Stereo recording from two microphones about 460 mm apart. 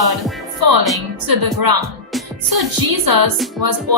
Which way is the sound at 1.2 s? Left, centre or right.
Right.